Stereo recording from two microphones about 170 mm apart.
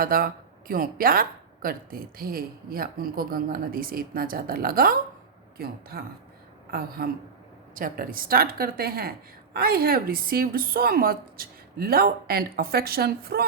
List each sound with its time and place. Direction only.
0.0 s a woman's voice: 55° right (ahead or behind)